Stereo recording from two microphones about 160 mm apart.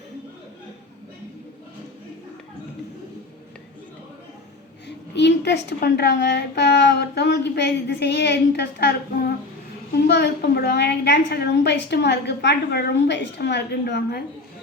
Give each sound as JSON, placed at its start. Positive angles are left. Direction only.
{"t": 5.1, "sound": "a woman's voice", "side_deg": 90}